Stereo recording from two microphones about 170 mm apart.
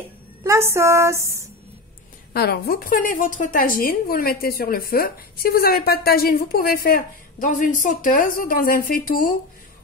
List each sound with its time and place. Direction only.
0.4 s a woman's voice: 15° right (ahead or behind)
2.3 s a woman's voice: 65° left (ahead or behind)